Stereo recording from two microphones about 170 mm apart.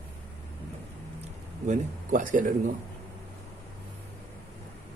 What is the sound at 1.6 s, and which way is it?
Speech, 45° right (ahead or behind).